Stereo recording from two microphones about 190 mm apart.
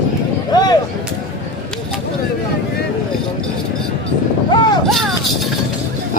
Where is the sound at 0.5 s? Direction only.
20° left (ahead or behind).